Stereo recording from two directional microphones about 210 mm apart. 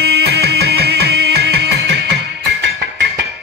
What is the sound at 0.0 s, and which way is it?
Music, 50° right (ahead or behind).